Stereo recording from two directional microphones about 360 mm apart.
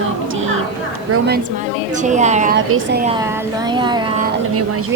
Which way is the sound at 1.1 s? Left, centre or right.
Right.